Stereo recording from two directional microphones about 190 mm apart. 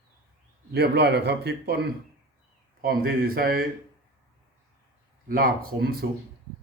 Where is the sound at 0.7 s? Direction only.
60° right (ahead or behind).